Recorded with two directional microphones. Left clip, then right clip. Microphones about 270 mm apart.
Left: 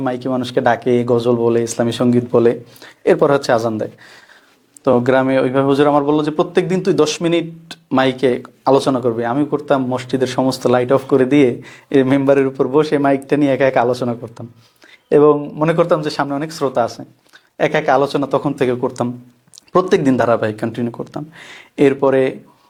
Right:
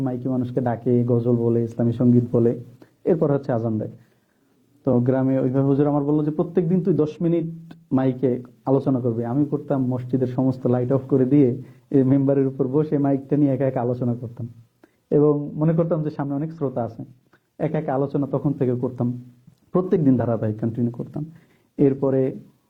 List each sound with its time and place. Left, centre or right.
0.0 s a man's voice: centre
1.3 s a man's voice: left
10.4 s speech: left
10.7 s a man's voice: centre